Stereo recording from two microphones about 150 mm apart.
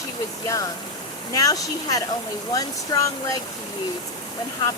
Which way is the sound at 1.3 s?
25° left (ahead or behind).